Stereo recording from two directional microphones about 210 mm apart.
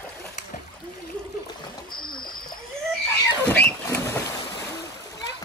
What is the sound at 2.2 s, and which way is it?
Splash, 45° left (ahead or behind).